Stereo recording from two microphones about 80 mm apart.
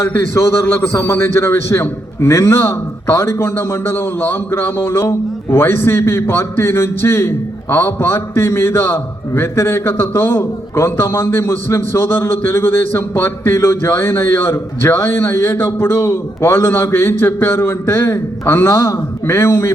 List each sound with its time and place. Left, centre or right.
0.0 s a man's voice: left